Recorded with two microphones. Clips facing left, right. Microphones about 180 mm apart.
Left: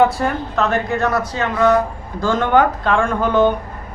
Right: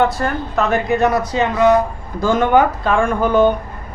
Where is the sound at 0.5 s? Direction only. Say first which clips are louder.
Right 5 dB; 15° right (ahead or behind).